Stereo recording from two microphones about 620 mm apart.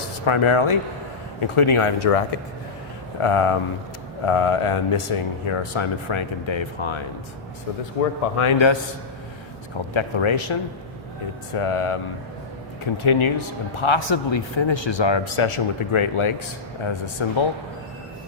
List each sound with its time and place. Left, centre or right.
0.3 s a man's voice: left
3.2 s a man's voice: left
8.0 s a man's voice: left
8.4 s a man's voice: left
9.9 s a man's voice: left